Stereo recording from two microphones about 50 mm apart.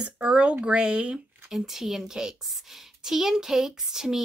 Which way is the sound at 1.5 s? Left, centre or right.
Centre.